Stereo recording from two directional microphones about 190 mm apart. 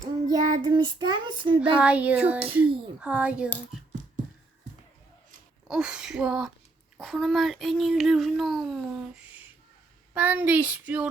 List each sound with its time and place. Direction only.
0.3 s child singing: 20° right (ahead or behind)
1.8 s child singing: 5° right (ahead or behind)
5.6 s speech: 5° right (ahead or behind)
10.2 s child singing: 10° right (ahead or behind)